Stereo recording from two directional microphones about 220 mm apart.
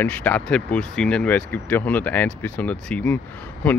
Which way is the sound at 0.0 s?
5° left (ahead or behind).